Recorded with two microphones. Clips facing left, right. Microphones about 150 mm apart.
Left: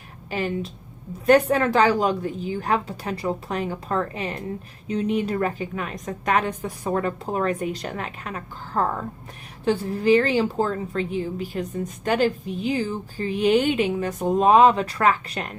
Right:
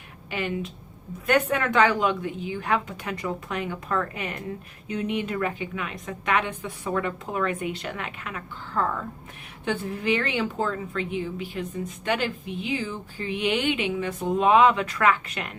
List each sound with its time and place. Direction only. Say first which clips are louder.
0.3 s a woman's voice: left 3 dB; 35° left (ahead or behind)